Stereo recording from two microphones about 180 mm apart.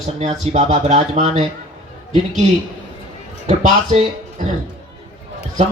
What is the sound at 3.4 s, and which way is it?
Speech, 35° right (ahead or behind).